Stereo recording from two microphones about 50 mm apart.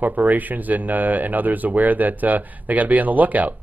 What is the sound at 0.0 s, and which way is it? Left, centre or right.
Speech, right.